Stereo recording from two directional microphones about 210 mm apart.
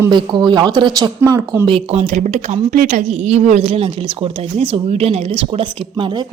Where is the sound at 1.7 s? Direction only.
30° right (ahead or behind).